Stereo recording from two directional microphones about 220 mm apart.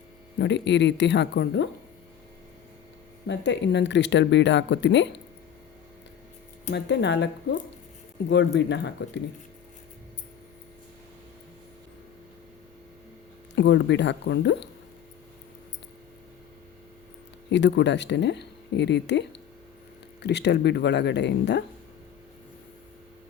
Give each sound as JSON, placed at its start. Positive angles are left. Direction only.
{"t": 0.3, "sound": "speech", "side_deg": 50}
{"t": 3.2, "sound": "speech", "side_deg": 55}
{"t": 6.7, "sound": "speech", "side_deg": 50}
{"t": 13.6, "sound": "speech", "side_deg": 55}
{"t": 17.5, "sound": "speech", "side_deg": 55}